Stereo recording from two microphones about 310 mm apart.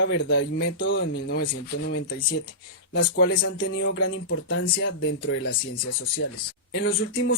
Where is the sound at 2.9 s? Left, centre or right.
Left.